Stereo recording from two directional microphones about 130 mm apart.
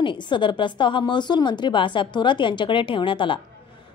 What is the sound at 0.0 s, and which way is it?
Speech, 40° left (ahead or behind).